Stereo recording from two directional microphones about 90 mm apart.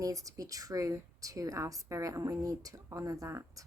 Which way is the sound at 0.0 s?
40° right (ahead or behind).